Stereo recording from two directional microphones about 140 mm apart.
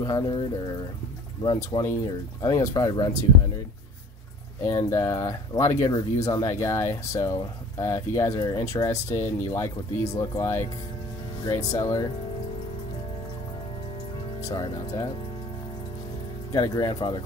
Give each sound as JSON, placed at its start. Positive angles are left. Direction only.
{"t": 0.0, "sound": "speech", "side_deg": 30}
{"t": 1.4, "sound": "speech", "side_deg": 30}
{"t": 4.6, "sound": "speech", "side_deg": 20}
{"t": 14.4, "sound": "speech", "side_deg": 25}
{"t": 16.6, "sound": "speech", "side_deg": 25}